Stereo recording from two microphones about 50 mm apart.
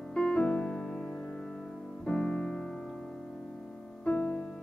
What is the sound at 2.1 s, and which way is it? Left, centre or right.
Piano, centre.